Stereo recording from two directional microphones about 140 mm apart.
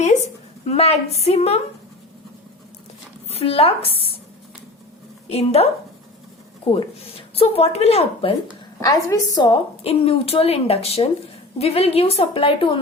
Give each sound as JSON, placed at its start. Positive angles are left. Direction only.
{"t": 0.6, "sound": "speech", "side_deg": 50}
{"t": 3.2, "sound": "speech", "side_deg": 45}
{"t": 5.3, "sound": "speech", "side_deg": 45}
{"t": 6.7, "sound": "speech", "side_deg": 45}
{"t": 8.8, "sound": "a woman's voice", "side_deg": 25}
{"t": 9.8, "sound": "speech", "side_deg": 45}